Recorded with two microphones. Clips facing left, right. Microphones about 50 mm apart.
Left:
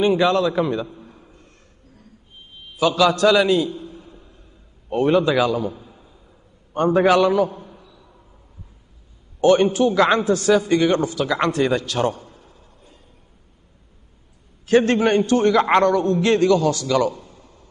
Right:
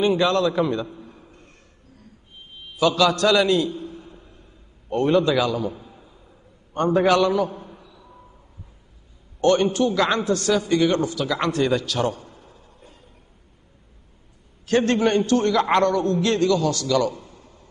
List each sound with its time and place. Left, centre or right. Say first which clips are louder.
0.0 s a man's voice: left 2 dB; centre
2.8 s a man's voice: left 2 dB; centre
3.8 s a sound: right 2 dB; centre
4.8 s a man's voice: left 2 dB; centre
7.5 s a sound: even; centre
9.4 s a man's voice: left 3 dB; centre
14.7 s a man's voice: left 3 dB; centre